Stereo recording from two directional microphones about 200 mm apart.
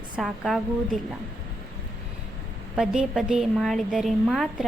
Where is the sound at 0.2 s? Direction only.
Centre (ahead or behind).